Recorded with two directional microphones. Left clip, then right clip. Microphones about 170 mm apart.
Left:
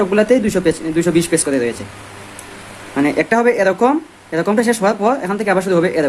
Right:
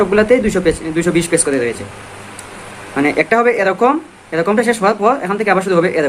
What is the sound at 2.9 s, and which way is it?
Speech, 30° left (ahead or behind).